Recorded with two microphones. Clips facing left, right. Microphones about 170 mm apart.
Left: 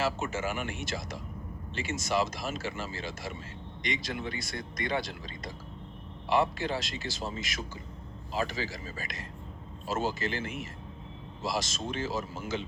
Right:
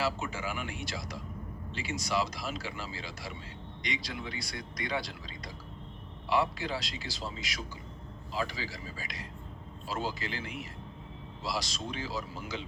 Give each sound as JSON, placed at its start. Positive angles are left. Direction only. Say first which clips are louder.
{"t": 0.0, "sound": "speech", "louder": "left 2 dB", "side_deg": 45}